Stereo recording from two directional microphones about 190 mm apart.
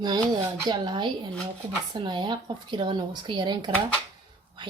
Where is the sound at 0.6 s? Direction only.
25° right (ahead or behind).